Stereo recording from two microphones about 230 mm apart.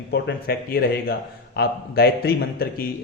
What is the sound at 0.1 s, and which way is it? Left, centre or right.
Speech, left.